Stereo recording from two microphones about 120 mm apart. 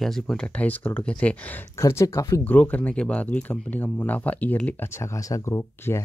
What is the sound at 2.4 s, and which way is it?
Speech, 15° left (ahead or behind).